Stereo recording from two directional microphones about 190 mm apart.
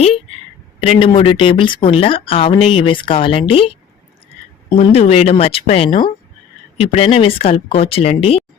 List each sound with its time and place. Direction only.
0.8 s speech: 30° left (ahead or behind)
4.7 s speech: 30° left (ahead or behind)